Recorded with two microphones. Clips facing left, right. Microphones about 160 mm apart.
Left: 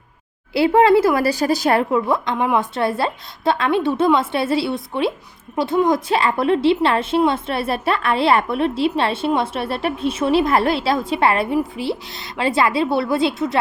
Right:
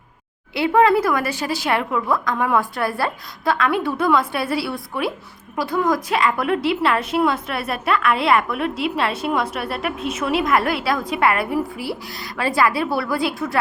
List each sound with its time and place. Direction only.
0.5 s a woman's voice: 30° left (ahead or behind)